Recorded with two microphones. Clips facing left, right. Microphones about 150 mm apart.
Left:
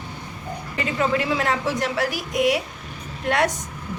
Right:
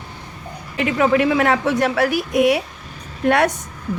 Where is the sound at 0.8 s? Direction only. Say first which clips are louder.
Right 7 dB; 65° right (ahead or behind).